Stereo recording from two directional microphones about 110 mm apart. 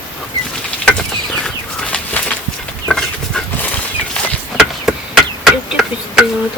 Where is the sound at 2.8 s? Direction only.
5° left (ahead or behind).